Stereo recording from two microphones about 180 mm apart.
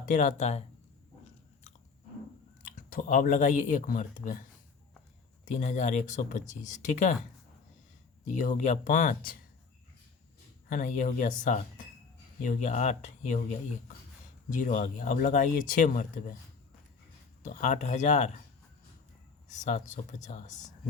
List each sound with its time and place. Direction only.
0.0 s speech: 45° left (ahead or behind)
2.6 s speech: 50° left (ahead or behind)
5.5 s speech: 40° left (ahead or behind)
8.3 s speech: 45° left (ahead or behind)
10.7 s speech: 45° left (ahead or behind)
17.4 s speech: 40° left (ahead or behind)
19.5 s speech: 45° left (ahead or behind)